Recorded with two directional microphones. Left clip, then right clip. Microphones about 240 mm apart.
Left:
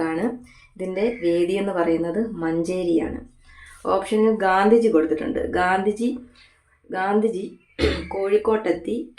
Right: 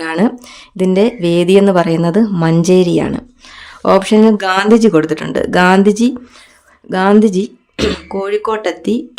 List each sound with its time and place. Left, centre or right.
0.0 s speech: right